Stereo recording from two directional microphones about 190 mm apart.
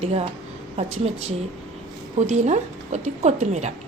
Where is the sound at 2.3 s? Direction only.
35° right (ahead or behind).